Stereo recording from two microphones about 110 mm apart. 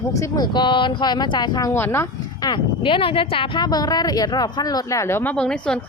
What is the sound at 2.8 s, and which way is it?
A woman's voice, 50° left (ahead or behind).